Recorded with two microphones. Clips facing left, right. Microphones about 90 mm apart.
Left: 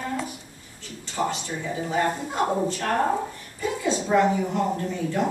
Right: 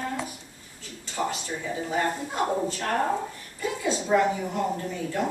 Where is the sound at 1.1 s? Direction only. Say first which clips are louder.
Left 2 dB; 5° left (ahead or behind).